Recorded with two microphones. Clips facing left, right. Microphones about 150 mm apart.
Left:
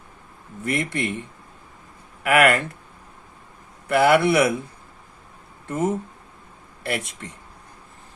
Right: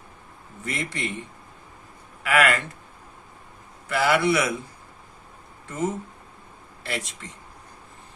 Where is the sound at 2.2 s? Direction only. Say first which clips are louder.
Left 4 dB; 55° left (ahead or behind).